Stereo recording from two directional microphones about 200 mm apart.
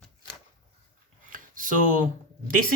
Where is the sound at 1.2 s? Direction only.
40° right (ahead or behind).